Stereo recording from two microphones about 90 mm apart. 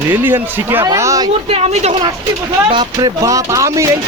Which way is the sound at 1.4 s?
90° right.